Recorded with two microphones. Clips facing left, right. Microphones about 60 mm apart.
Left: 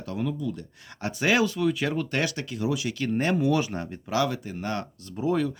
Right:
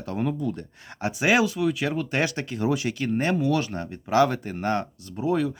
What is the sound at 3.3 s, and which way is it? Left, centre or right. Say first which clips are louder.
Speech: even; centre.